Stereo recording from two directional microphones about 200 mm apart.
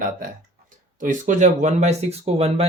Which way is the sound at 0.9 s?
40° right (ahead or behind).